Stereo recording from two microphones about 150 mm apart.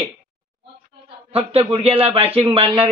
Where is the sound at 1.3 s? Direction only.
40° right (ahead or behind).